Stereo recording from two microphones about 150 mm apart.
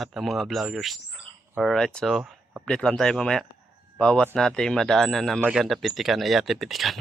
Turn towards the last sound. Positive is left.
turn(degrees=0)  # may be behind; listen again after turning